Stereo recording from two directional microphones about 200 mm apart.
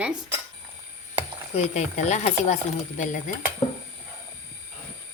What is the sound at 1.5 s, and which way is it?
Speech, 35° left (ahead or behind).